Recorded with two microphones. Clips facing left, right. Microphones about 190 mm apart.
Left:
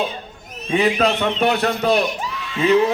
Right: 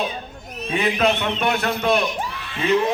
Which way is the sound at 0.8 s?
35° left (ahead or behind).